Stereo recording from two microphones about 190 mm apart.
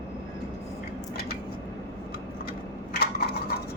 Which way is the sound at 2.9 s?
55° left (ahead or behind).